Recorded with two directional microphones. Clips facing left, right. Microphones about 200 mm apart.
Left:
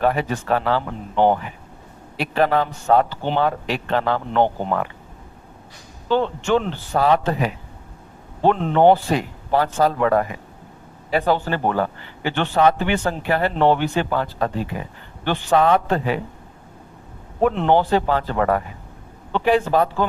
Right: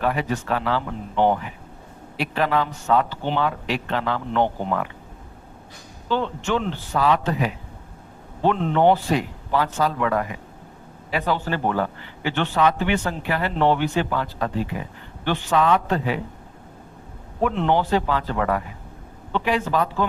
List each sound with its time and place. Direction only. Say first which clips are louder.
0.0 s a man's voice: left 3 dB; 40° left (ahead or behind)
6.1 s a man's voice: left 4 dB; 45° left (ahead or behind)
17.4 s a man's voice: left 4 dB; 40° left (ahead or behind)
19.3 s a man's voice: left 5 dB; 50° left (ahead or behind)